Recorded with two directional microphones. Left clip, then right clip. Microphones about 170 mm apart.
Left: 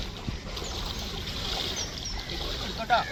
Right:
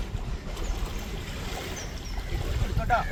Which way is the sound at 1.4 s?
35° right (ahead or behind).